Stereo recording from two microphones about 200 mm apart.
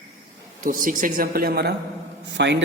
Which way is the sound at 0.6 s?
40° right (ahead or behind).